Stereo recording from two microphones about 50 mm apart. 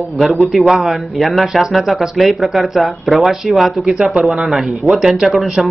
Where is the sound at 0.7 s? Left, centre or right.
Centre.